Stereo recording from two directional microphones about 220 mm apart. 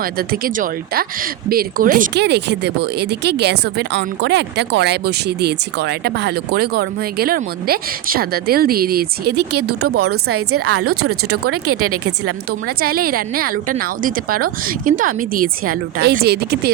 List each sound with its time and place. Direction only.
0.0 s speech: 40° right (ahead or behind)
9.8 s speech: 90° right
12.2 s a woman's voice: 45° right (ahead or behind)